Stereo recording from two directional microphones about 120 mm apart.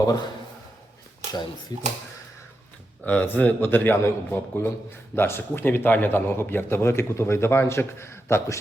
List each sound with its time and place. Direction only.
0.0 s speech: 30° left (ahead or behind)
1.7 s speech: 30° left (ahead or behind)
3.0 s a man's voice: 15° left (ahead or behind)